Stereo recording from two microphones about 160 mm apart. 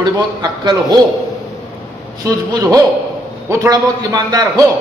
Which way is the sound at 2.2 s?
25° right (ahead or behind).